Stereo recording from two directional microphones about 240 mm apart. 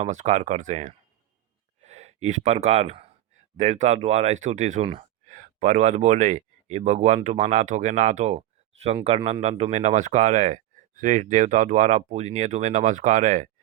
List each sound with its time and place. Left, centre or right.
0.0 s speech: right